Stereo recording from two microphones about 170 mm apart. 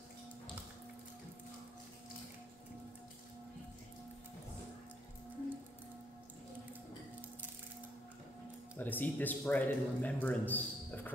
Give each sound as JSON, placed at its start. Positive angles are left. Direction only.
{"t": 8.7, "sound": "a man's voice", "side_deg": 10}